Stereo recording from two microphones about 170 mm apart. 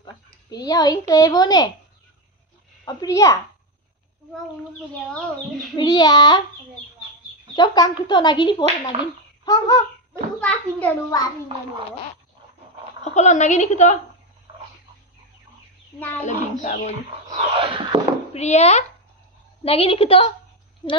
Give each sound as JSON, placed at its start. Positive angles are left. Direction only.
{"t": 0.0, "sound": "a child's voice", "side_deg": 25}
{"t": 2.8, "sound": "speech", "side_deg": 20}
{"t": 5.8, "sound": "speech", "side_deg": 25}
{"t": 7.5, "sound": "speech", "side_deg": 25}
{"t": 8.9, "sound": "a sound", "side_deg": -40}
{"t": 9.4, "sound": "bird", "side_deg": 20}
{"t": 10.4, "sound": "a child's voice", "side_deg": 10}
{"t": 13.0, "sound": "a woman's voice", "side_deg": 40}
{"t": 16.3, "sound": "a woman's voice", "side_deg": 45}
{"t": 17.4, "sound": "a sound", "side_deg": -35}
{"t": 18.3, "sound": "a woman's voice", "side_deg": 40}